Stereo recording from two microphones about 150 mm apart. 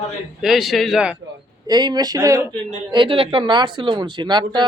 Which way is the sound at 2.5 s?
35° right (ahead or behind).